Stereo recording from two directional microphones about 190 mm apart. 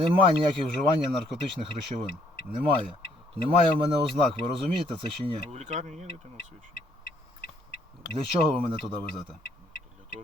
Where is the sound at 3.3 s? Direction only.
30° right (ahead or behind).